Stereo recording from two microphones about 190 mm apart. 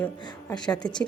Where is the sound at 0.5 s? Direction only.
20° left (ahead or behind).